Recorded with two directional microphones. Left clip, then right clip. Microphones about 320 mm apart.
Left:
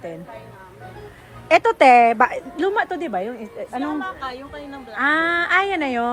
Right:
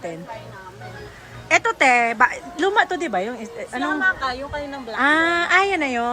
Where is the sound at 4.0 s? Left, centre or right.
Right.